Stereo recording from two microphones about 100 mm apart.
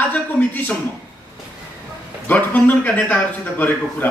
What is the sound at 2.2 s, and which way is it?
A man's voice, 20° left (ahead or behind).